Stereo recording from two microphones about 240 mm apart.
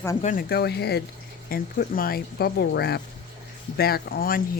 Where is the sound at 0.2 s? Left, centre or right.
Left.